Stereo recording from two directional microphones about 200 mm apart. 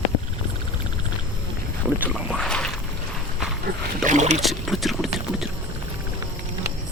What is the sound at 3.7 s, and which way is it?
Rowboat, 40° right (ahead or behind).